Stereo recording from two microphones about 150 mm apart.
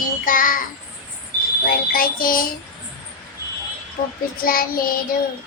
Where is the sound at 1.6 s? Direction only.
75° left (ahead or behind).